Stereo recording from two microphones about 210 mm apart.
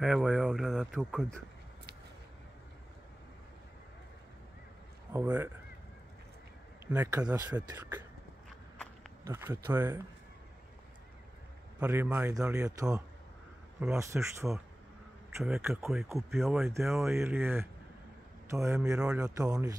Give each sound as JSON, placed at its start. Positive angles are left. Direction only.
{"t": 0.0, "sound": "speech", "side_deg": 0}
{"t": 5.1, "sound": "speech", "side_deg": -10}
{"t": 6.9, "sound": "speech", "side_deg": -5}
{"t": 7.2, "sound": "speech", "side_deg": -20}
{"t": 9.2, "sound": "speech", "side_deg": -10}
{"t": 11.8, "sound": "speech", "side_deg": -10}
{"t": 18.9, "sound": "speech", "side_deg": -5}
{"t": 19.2, "sound": "speech", "side_deg": -15}